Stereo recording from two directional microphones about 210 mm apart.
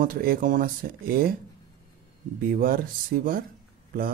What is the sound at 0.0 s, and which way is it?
Speech, 45° right (ahead or behind).